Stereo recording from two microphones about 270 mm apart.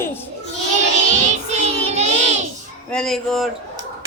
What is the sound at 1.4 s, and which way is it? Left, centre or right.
Child singing, right.